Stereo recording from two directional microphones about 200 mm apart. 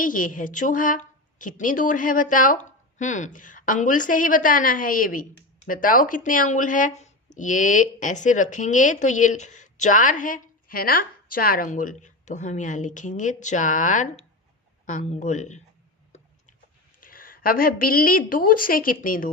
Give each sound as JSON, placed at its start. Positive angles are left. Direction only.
{"t": 0.0, "sound": "speech", "side_deg": 40}
{"t": 17.0, "sound": "a woman's voice", "side_deg": 45}